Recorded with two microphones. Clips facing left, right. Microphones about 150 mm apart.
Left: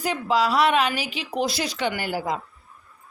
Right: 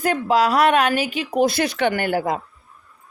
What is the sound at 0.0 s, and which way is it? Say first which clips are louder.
A woman's voice: right 4 dB; 55° right (ahead or behind).